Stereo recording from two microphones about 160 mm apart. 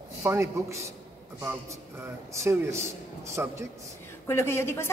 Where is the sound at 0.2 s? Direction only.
15° right (ahead or behind).